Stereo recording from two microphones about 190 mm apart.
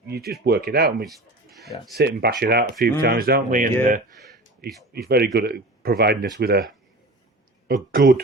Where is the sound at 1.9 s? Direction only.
60° right (ahead or behind).